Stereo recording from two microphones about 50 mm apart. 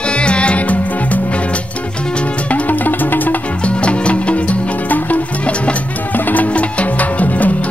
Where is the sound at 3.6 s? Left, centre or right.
Left.